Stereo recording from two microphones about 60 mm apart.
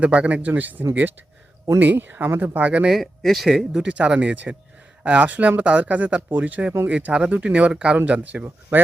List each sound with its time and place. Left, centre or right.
0.0 s speech: right
2.6 s speech: right
2.9 s speech: centre
3.7 s speech: centre